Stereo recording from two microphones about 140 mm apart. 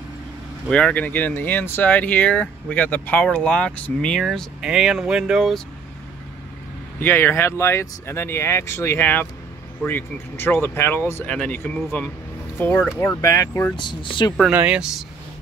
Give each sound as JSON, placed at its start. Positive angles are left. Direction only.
{"t": 0.7, "sound": "speech", "side_deg": 5}
{"t": 7.0, "sound": "speech", "side_deg": 15}
{"t": 13.0, "sound": "speech", "side_deg": 20}
{"t": 13.7, "sound": "speech", "side_deg": 35}
{"t": 14.5, "sound": "speech", "side_deg": -10}